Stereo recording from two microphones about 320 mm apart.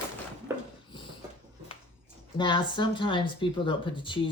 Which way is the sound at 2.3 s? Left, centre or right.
Centre.